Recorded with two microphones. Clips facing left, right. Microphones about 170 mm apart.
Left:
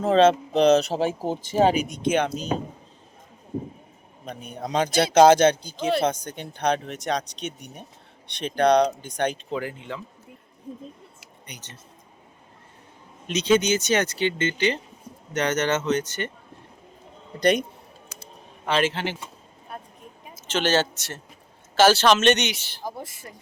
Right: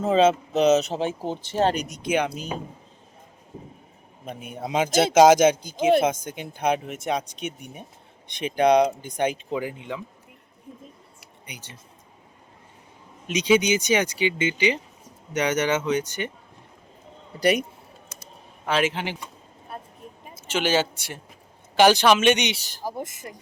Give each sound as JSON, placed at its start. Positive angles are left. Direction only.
{"t": 0.0, "sound": "speech", "side_deg": -5}
{"t": 2.0, "sound": "speech", "side_deg": -10}
{"t": 4.5, "sound": "speech", "side_deg": -5}
{"t": 11.4, "sound": "speech", "side_deg": -10}
{"t": 13.2, "sound": "speech", "side_deg": -10}
{"t": 17.4, "sound": "speech", "side_deg": -10}
{"t": 20.5, "sound": "speech", "side_deg": -10}
{"t": 22.5, "sound": "speech", "side_deg": -40}
{"t": 22.8, "sound": "speech", "side_deg": -10}